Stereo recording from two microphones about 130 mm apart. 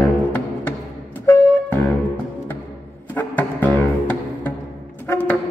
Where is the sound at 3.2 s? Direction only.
15° left (ahead or behind).